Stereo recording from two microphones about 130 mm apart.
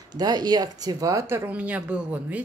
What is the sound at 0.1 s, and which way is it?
Speech, 30° right (ahead or behind).